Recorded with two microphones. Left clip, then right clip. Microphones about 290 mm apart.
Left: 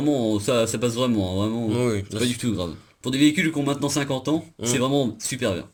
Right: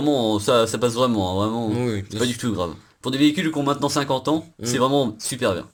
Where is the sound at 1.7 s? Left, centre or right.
Centre.